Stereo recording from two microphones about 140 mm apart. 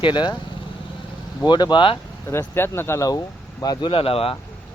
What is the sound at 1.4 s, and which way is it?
Speech, 30° left (ahead or behind).